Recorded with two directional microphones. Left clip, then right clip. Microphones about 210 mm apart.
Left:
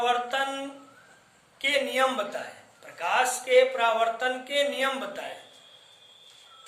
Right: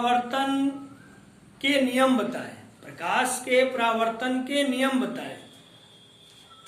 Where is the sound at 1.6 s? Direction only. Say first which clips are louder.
Right 2 dB; 20° left (ahead or behind).